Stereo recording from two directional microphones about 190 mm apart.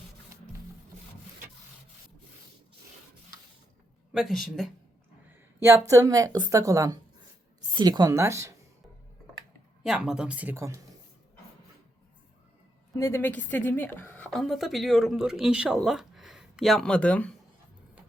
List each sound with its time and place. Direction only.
4.1 s a woman's voice: centre (ahead or behind)
5.9 s a woman's voice: 15° right (ahead or behind)
9.8 s a woman's voice: 5° right (ahead or behind)
13.0 s a woman's voice: 15° left (ahead or behind)